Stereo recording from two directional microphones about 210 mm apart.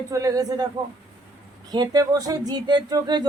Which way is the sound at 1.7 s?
20° right (ahead or behind).